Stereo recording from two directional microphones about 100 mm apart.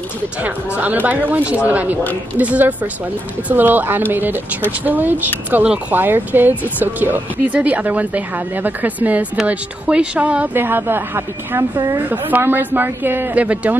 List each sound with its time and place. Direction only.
0.4 s a woman's voice: 15° right (ahead or behind)
11.7 s a woman's voice: 40° right (ahead or behind)
12.1 s a woman's voice: 20° right (ahead or behind)